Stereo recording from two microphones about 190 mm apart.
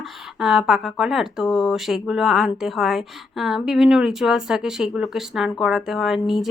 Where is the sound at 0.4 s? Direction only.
Centre (ahead or behind).